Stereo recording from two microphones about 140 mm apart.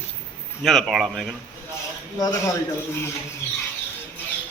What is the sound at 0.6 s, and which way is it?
Speech, centre (ahead or behind).